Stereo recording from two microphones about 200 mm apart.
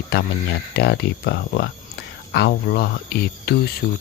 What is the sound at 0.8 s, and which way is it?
Speech, 55° left (ahead or behind).